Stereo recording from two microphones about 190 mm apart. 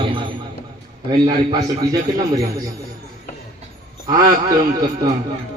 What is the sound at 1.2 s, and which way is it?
A man's voice, 20° right (ahead or behind).